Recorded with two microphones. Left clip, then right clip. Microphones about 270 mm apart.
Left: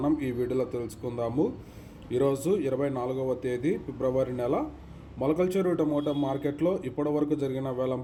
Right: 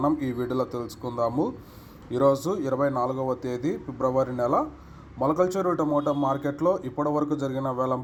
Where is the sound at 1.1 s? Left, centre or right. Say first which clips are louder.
Right 3 dB; right.